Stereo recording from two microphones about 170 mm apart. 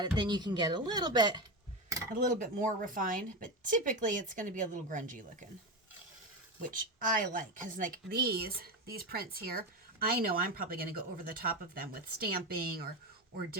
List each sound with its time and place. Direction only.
0.0 s speech: 25° right (ahead or behind)
2.1 s speech: 50° right (ahead or behind)
6.6 s speech: 55° right (ahead or behind)